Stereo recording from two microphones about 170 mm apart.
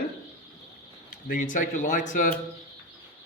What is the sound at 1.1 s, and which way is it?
Speech, 50° left (ahead or behind).